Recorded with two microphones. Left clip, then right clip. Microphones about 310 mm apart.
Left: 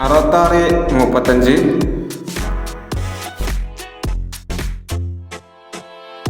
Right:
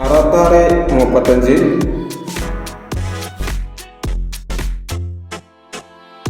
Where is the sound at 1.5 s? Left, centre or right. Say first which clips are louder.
Right 1 dB; centre.